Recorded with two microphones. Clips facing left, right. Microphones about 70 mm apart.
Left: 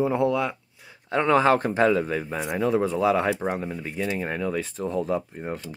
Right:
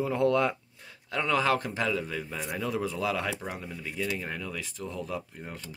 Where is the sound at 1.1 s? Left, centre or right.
Left.